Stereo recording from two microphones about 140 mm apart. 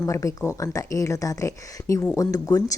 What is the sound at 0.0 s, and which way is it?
A woman's voice, 20° left (ahead or behind).